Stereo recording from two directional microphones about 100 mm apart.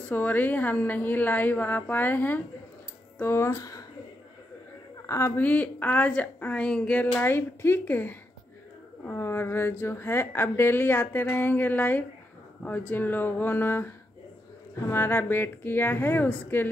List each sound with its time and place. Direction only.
0.1 s a woman's voice: 20° left (ahead or behind); by 3.8 s 35° left (ahead or behind)
5.0 s a woman's voice: 30° left (ahead or behind)
5.4 s a woman's voice: 15° left (ahead or behind)